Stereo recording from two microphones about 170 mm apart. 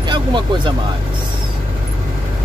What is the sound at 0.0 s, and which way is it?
Speech, 25° right (ahead or behind).